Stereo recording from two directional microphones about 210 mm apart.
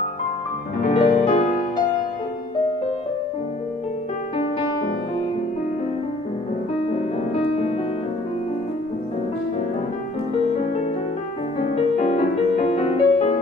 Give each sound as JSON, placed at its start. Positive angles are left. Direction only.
{"t": 0.9, "sound": "music", "side_deg": 25}
{"t": 7.3, "sound": "music", "side_deg": 30}
{"t": 11.6, "sound": "music", "side_deg": 30}